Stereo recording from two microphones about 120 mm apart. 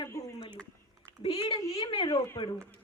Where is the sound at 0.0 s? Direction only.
25° left (ahead or behind).